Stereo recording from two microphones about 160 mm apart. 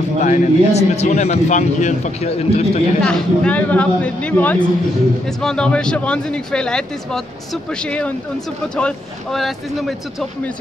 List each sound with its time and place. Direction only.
0.2 s a man's voice: 45° left (ahead or behind)
3.0 s speech: 5° left (ahead or behind)